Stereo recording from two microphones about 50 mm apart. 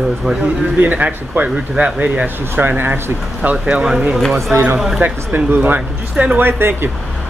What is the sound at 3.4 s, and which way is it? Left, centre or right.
Speech, right.